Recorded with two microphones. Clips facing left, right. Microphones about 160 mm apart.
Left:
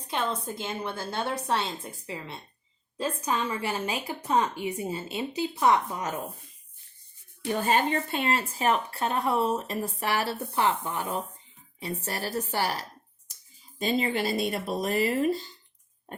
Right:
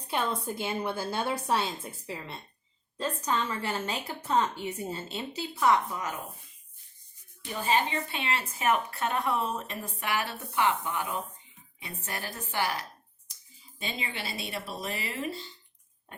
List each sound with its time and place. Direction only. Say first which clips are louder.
0.1 s a woman's voice: even; 5° right (ahead or behind)
3.0 s a woman's voice: left 1 dB; 10° left (ahead or behind)
7.4 s speech: left 3 dB; 55° left (ahead or behind)
16.1 s pig: left 7 dB; 40° left (ahead or behind)